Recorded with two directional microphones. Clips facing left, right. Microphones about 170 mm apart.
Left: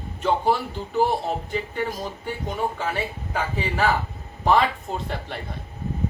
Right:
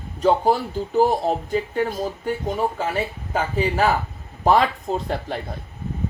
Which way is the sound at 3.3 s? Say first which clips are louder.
Right 5 dB; 40° right (ahead or behind).